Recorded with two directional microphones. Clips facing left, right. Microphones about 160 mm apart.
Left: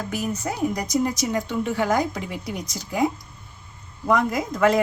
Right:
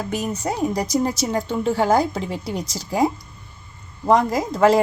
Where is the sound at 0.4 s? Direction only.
35° right (ahead or behind).